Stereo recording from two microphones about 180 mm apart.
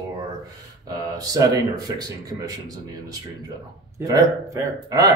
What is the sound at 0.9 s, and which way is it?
A man's voice, 20° right (ahead or behind).